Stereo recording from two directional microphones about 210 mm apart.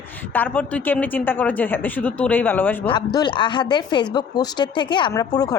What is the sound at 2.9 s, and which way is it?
A woman's voice, 20° left (ahead or behind).